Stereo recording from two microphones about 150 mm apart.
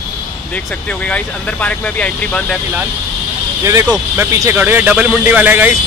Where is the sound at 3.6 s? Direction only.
20° right (ahead or behind).